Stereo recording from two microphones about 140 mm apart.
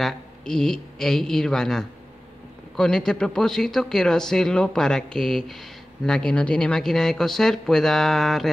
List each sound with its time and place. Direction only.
0.0 s speech: 5° left (ahead or behind)